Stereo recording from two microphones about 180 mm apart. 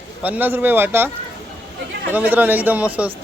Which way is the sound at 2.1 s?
10° right (ahead or behind).